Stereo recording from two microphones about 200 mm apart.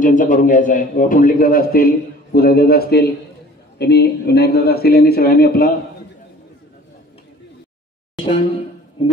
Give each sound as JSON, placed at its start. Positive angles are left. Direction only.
{"t": 0.0, "sound": "a man's voice", "side_deg": 40}
{"t": 9.0, "sound": "speech", "side_deg": 25}